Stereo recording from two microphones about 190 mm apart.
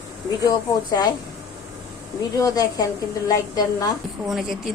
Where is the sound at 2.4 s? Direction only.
20° left (ahead or behind).